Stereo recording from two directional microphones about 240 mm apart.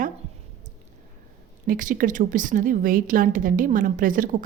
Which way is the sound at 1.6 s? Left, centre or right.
Right.